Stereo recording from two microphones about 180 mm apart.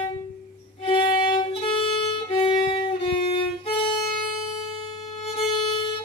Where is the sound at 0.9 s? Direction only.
30° left (ahead or behind).